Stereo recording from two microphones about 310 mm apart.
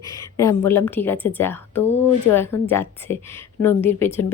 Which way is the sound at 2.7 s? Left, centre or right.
Centre.